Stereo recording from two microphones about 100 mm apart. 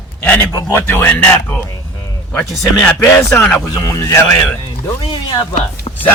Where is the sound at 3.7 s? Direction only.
40° left (ahead or behind).